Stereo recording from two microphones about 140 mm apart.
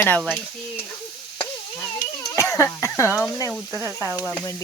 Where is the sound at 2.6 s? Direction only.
10° left (ahead or behind).